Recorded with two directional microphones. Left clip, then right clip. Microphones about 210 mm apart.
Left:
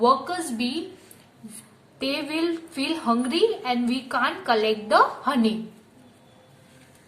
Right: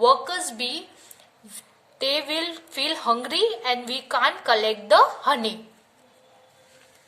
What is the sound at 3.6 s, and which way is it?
A woman's voice, 40° right (ahead or behind).